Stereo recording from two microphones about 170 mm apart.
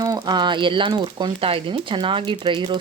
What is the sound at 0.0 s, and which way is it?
Speech, 25° right (ahead or behind).